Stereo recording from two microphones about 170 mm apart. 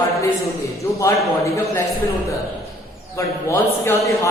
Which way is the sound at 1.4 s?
15° left (ahead or behind).